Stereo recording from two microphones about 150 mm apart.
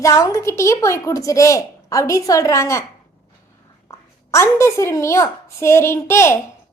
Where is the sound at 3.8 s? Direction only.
20° left (ahead or behind).